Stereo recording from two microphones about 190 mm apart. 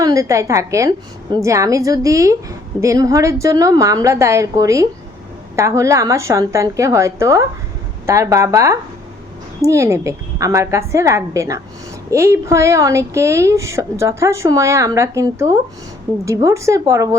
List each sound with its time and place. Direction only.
0.0 s a woman's voice: 15° right (ahead or behind)